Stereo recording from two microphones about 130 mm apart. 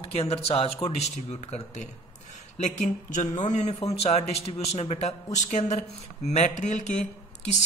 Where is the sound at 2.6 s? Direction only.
70° left (ahead or behind).